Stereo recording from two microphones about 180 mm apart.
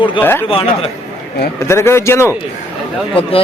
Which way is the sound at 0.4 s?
30° left (ahead or behind).